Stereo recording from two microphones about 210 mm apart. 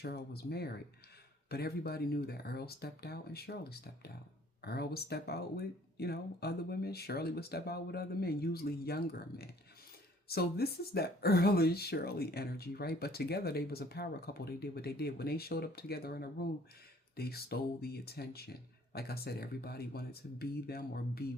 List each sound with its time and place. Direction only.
0.0 s speech: 50° left (ahead or behind)